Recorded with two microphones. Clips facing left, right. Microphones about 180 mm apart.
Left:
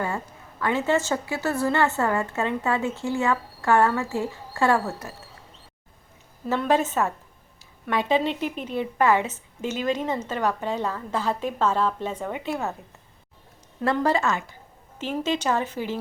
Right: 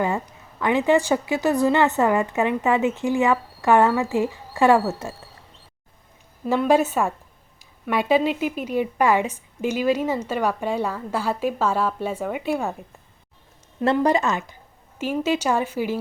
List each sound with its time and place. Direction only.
0.6 s a woman's voice: 15° right (ahead or behind)
6.5 s a woman's voice: 10° right (ahead or behind)
13.9 s a woman's voice: 15° right (ahead or behind)